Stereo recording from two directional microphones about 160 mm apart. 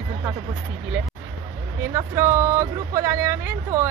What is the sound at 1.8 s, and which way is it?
Speech, 15° right (ahead or behind).